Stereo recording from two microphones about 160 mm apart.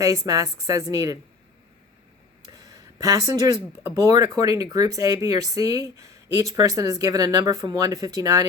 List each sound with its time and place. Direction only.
0.0 s speech: 20° right (ahead or behind)
2.5 s speech: 25° right (ahead or behind)